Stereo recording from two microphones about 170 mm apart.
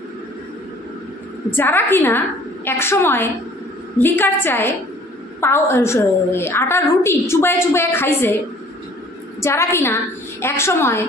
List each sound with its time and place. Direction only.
1.6 s a woman's voice: 10° left (ahead or behind)
9.4 s a woman's voice: 15° left (ahead or behind)